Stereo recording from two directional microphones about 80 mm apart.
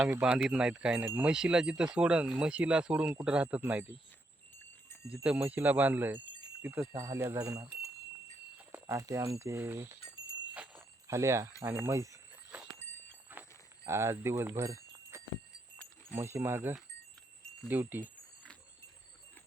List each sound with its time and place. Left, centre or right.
0.5 s speech: centre
5.1 s speech: centre; by 7.9 s right
8.9 s speech: right
10.8 s jingle bell: right
11.6 s speech: right
13.3 s livestock: right
13.8 s speech: right